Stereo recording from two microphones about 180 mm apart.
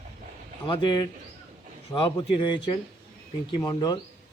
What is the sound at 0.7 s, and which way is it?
Speech, 25° left (ahead or behind).